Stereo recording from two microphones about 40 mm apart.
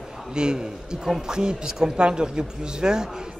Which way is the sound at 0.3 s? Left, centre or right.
Centre.